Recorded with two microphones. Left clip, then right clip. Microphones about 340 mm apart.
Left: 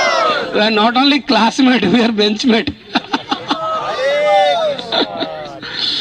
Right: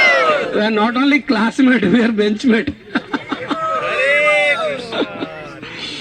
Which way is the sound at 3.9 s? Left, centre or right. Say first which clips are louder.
Right 2 dB; left.